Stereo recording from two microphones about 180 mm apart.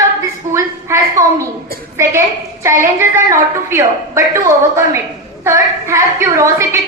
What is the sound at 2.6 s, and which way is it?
A woman's voice, 15° right (ahead or behind).